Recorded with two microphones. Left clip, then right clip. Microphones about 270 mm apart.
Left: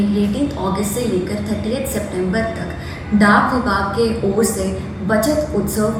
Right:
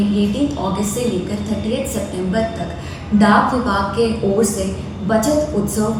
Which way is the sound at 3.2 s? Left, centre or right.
Centre.